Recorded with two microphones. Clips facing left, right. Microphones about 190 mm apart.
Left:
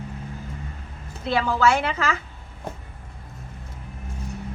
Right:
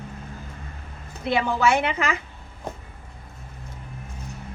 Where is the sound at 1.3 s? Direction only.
20° right (ahead or behind).